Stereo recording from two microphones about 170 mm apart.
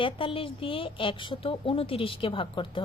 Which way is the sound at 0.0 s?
30° left (ahead or behind).